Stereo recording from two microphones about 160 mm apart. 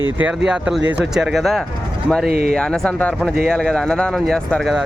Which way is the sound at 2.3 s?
70° right (ahead or behind).